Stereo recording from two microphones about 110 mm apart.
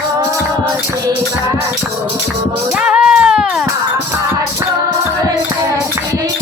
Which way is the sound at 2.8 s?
10° right (ahead or behind).